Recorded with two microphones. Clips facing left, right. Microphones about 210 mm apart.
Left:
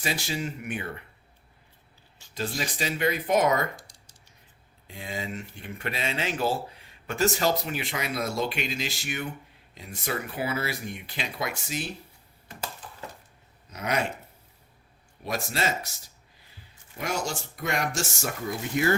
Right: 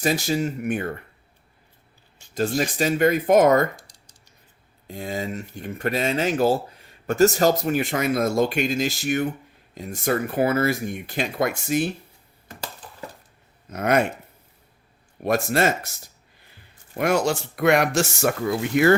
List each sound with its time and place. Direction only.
0.0 s speech: 45° right (ahead or behind)
2.3 s speech: 45° right (ahead or behind)
4.9 s speech: 45° right (ahead or behind)
13.7 s speech: 55° right (ahead or behind)
15.2 s speech: 55° right (ahead or behind)
16.9 s speech: 60° right (ahead or behind)